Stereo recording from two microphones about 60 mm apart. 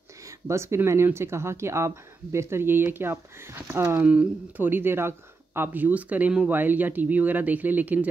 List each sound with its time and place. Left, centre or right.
0.5 s speech: right
4.0 s speech: right
4.6 s speech: right